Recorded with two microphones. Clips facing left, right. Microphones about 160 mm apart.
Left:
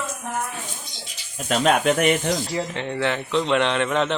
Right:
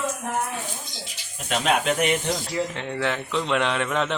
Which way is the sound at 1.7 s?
50° left (ahead or behind).